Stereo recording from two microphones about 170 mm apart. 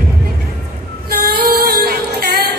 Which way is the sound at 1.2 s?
65° right (ahead or behind).